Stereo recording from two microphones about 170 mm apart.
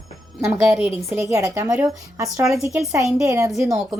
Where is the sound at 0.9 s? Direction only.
15° right (ahead or behind).